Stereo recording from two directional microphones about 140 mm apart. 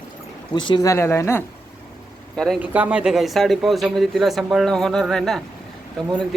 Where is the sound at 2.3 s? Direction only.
5° left (ahead or behind).